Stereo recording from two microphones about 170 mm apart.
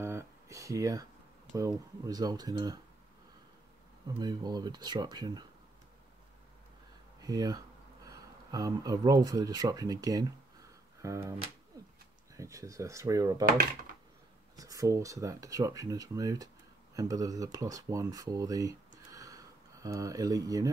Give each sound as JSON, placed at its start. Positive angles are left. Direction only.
{"t": 0.0, "sound": "a sound", "side_deg": -15}
{"t": 1.6, "sound": "speech", "side_deg": -20}
{"t": 4.2, "sound": "speech", "side_deg": -25}
{"t": 7.2, "sound": "speech", "side_deg": -20}
{"t": 12.4, "sound": "speech", "side_deg": -20}
{"t": 14.6, "sound": "speech", "side_deg": -20}